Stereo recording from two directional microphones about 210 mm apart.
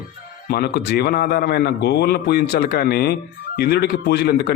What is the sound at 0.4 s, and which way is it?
A man's voice, 50° left (ahead or behind).